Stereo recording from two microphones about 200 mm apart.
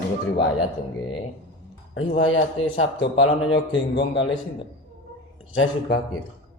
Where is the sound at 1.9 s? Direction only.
70° left (ahead or behind).